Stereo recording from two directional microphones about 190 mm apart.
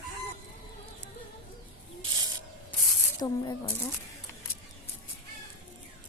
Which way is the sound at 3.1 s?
20° left (ahead or behind).